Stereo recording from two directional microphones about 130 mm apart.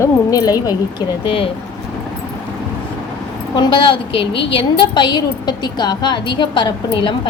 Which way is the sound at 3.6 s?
40° left (ahead or behind).